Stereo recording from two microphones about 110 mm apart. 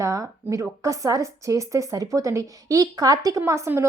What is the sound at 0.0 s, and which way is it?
Speech, 30° right (ahead or behind).